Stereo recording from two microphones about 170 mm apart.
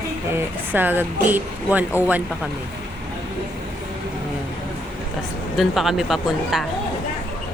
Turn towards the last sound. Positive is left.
turn(degrees=0)  # may be behind; listen again after turning